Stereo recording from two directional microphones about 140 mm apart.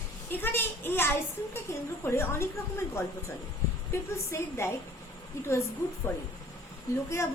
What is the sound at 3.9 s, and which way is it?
Speech, 20° left (ahead or behind).